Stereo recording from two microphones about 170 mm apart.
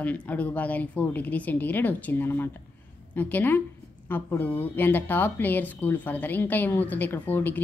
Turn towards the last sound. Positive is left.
turn(degrees=10)  # may be behind; listen again after turning